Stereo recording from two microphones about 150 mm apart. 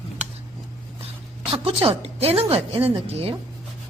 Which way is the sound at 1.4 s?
40° right (ahead or behind).